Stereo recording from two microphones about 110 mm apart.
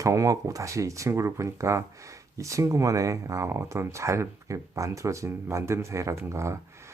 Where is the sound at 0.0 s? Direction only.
30° right (ahead or behind).